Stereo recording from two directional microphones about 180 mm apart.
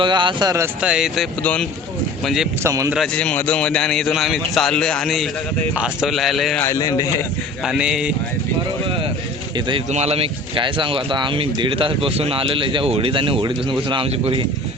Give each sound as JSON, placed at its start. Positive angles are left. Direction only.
{"t": 0.0, "sound": "speech", "side_deg": -25}
{"t": 0.8, "sound": "a man's voice", "side_deg": -5}
{"t": 2.6, "sound": "speech", "side_deg": -15}
{"t": 2.9, "sound": "a man's voice", "side_deg": 0}
{"t": 6.6, "sound": "a man's voice", "side_deg": 15}
{"t": 7.6, "sound": "a man's voice", "side_deg": -5}
{"t": 9.6, "sound": "speech", "side_deg": -25}